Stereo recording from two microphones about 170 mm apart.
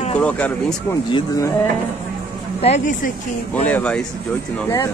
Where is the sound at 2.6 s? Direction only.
45° left (ahead or behind).